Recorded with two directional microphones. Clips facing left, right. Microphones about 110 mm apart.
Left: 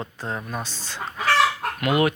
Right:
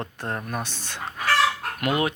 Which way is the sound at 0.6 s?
55° right (ahead or behind).